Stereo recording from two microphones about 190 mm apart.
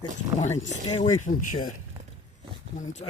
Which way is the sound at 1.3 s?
45° left (ahead or behind).